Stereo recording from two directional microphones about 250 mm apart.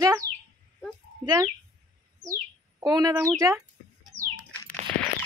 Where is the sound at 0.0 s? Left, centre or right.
Centre.